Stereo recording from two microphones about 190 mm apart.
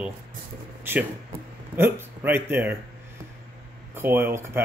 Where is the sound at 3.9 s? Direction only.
10° right (ahead or behind).